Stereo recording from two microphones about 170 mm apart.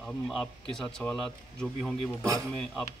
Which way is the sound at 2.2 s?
20° right (ahead or behind).